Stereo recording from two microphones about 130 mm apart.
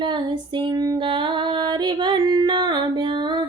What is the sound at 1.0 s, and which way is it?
Music, 40° right (ahead or behind).